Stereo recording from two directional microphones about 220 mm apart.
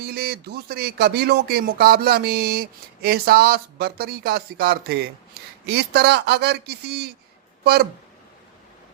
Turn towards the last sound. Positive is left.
turn(degrees=-45)  # may be behind; listen again after turning